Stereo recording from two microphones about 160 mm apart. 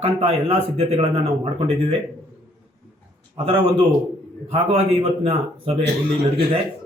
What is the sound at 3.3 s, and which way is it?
Speech, 30° right (ahead or behind).